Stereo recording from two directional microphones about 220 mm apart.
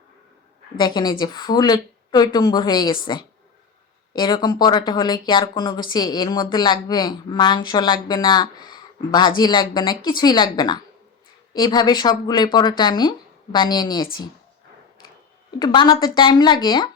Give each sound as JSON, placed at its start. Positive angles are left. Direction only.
{"t": 0.8, "sound": "speech", "side_deg": 20}
{"t": 15.5, "sound": "speech", "side_deg": 20}